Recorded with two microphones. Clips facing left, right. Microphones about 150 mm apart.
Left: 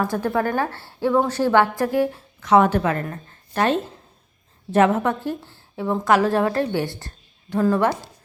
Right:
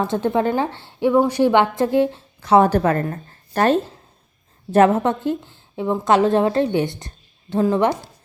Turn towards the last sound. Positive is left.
turn(degrees=-20)  # may be behind; listen again after turning